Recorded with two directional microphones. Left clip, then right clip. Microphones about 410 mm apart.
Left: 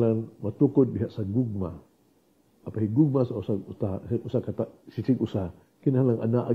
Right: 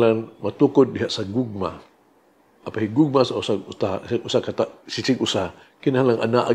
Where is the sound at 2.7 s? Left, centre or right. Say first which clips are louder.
Right 5 dB; centre.